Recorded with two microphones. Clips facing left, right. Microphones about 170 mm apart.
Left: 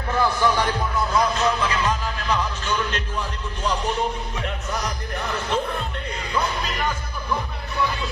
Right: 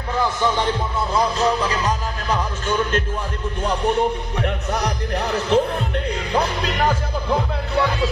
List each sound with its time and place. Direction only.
0.2 s speech: 20° right (ahead or behind)
1.1 s speech: 35° right (ahead or behind)
4.4 s speech: 65° right (ahead or behind)